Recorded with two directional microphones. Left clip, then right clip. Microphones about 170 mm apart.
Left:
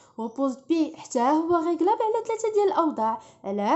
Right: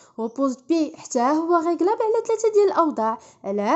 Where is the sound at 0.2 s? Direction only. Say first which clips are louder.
Right 4 dB; 20° right (ahead or behind).